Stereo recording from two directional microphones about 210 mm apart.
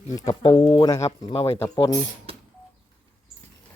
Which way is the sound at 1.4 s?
15° left (ahead or behind).